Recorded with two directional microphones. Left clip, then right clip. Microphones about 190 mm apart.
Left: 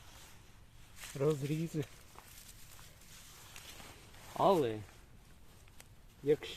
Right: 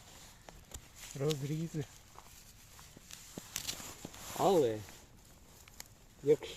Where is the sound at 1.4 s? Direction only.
15° left (ahead or behind).